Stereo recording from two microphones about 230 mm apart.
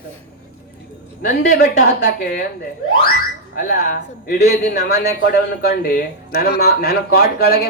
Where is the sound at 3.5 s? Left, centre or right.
Left.